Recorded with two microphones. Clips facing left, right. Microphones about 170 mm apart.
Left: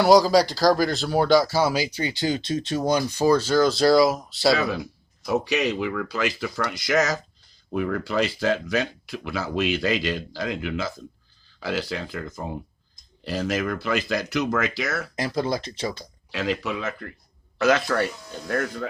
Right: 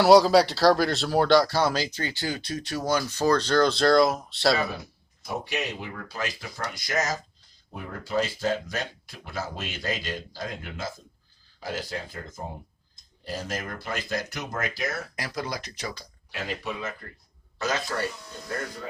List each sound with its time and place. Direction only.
0.0 s speech: centre (ahead or behind)
5.2 s speech: 90° left
15.1 s speech: 25° left (ahead or behind)
16.3 s speech: 90° left